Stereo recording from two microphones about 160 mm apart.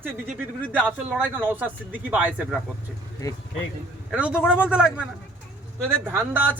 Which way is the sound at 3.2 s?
25° left (ahead or behind).